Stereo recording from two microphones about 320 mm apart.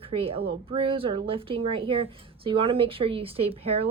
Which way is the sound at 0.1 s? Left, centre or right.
Centre.